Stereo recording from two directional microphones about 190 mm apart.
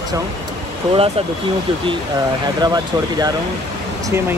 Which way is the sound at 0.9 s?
30° right (ahead or behind).